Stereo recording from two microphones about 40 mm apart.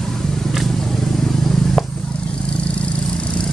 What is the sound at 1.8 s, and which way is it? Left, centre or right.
Vehicle, centre.